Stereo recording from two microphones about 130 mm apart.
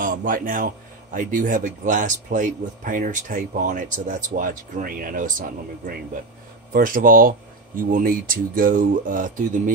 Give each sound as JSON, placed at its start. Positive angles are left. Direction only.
{"t": 0.0, "sound": "a man's voice", "side_deg": -90}